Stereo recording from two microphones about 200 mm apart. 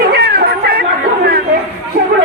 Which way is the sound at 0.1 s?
45° right (ahead or behind).